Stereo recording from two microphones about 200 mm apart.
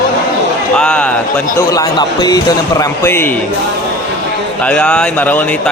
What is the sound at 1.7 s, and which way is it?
A man's voice, 20° left (ahead or behind).